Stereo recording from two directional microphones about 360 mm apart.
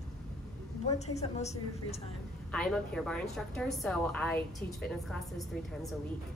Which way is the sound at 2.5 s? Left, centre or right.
Centre.